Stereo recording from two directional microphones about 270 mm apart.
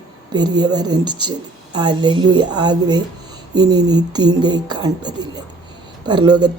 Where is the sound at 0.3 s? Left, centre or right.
Centre.